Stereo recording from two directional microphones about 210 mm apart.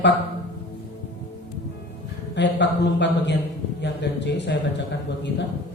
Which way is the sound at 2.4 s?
55° left (ahead or behind).